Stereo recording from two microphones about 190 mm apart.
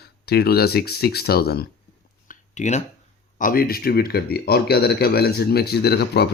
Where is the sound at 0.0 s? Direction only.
55° left (ahead or behind).